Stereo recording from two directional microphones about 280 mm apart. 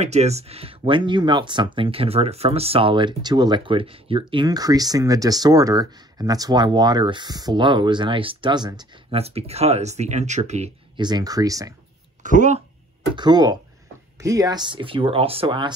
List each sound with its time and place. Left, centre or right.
0.0 s speech: right
12.2 s speech: right
13.1 s speech: centre